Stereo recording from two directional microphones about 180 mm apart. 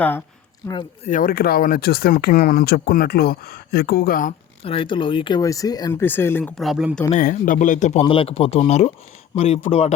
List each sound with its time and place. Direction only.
1.0 s speech: 50° left (ahead or behind)
4.6 s speech: 30° left (ahead or behind); by 6.5 s 10° left (ahead or behind)
6.6 s speech: centre (ahead or behind)
7.1 s speech: 50° left (ahead or behind)
8.0 s speech: 30° left (ahead or behind)